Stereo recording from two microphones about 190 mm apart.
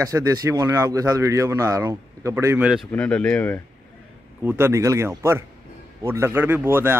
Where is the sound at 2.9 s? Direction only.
5° left (ahead or behind).